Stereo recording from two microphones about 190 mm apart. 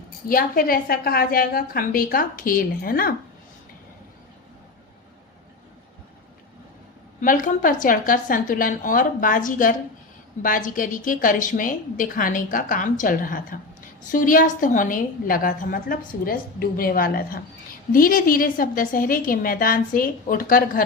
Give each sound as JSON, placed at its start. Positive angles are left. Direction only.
{"t": 0.3, "sound": "a woman's voice", "side_deg": 50}
{"t": 7.2, "sound": "a woman's voice", "side_deg": 45}